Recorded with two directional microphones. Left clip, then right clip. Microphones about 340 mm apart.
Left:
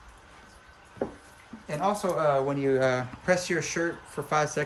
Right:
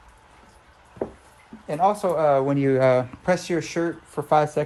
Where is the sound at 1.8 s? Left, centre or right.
Centre.